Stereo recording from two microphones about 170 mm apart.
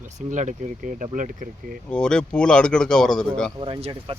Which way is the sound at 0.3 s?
45° right (ahead or behind).